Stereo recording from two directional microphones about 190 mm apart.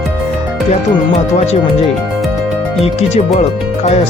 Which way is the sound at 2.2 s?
Centre (ahead or behind).